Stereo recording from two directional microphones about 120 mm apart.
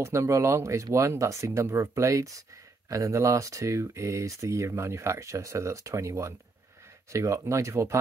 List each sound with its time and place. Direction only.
0.0 s speech: 25° right (ahead or behind)